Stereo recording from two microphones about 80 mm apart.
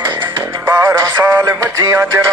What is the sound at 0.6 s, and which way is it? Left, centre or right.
Music, right.